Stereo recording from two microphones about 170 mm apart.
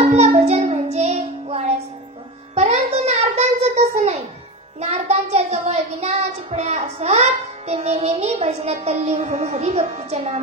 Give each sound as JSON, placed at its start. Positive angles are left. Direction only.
{"t": 0.1, "sound": "child singing", "side_deg": -35}
{"t": 2.5, "sound": "a sound", "side_deg": -45}
{"t": 4.7, "sound": "child singing", "side_deg": -40}
{"t": 10.0, "sound": "music", "side_deg": -40}